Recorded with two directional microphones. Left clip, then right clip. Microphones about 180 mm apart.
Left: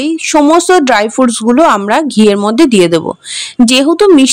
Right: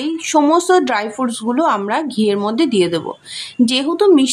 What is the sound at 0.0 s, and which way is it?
Speech, 40° left (ahead or behind).